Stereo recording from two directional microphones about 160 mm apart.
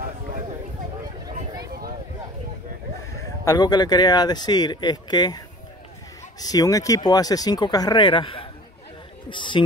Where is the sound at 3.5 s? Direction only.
25° left (ahead or behind).